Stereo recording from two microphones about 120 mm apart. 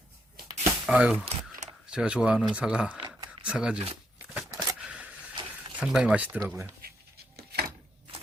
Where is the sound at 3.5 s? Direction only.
10° right (ahead or behind).